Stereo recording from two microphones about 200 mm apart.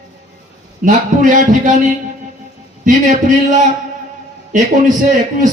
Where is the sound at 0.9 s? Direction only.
40° right (ahead or behind).